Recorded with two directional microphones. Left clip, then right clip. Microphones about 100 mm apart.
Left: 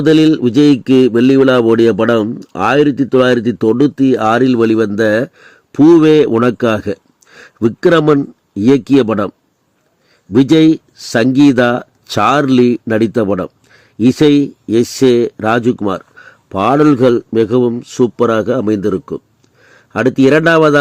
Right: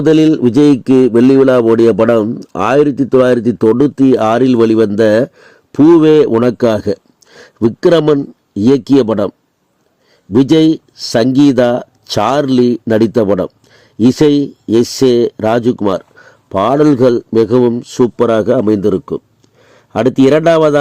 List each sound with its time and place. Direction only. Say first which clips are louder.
0.0 s a man's voice: right 1 dB; 30° right (ahead or behind)
10.3 s a man's voice: even; 30° right (ahead or behind)